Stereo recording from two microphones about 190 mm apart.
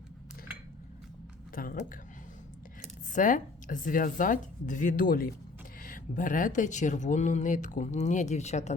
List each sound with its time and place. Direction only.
1.5 s speech: 45° left (ahead or behind)
3.1 s speech: 45° left (ahead or behind)